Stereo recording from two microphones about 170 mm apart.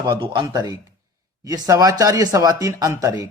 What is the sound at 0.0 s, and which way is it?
Speech, 25° right (ahead or behind).